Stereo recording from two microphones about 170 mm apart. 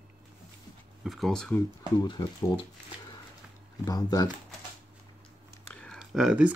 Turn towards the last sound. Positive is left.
turn(degrees=-5)  # may be behind; listen again after turning